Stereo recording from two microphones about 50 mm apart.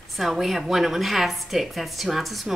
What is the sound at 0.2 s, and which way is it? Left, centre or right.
A woman's voice, centre.